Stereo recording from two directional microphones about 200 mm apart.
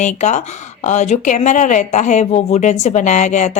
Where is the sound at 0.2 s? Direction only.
35° left (ahead or behind).